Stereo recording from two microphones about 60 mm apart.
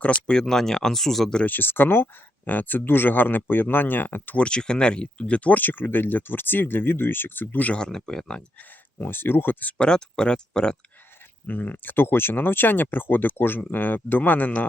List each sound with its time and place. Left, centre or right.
0.0 s speech: left
0.3 s speech: centre
1.5 s speech: left
4.4 s speech: centre
7.8 s speech: centre
9.0 s speech: left
9.7 s speech: centre
11.4 s speech: left